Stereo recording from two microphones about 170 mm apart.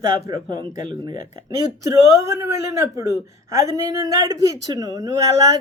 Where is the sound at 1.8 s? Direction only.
20° right (ahead or behind).